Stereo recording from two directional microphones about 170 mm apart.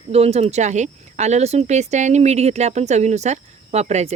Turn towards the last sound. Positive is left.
turn(degrees=-40)  # may be behind; listen again after turning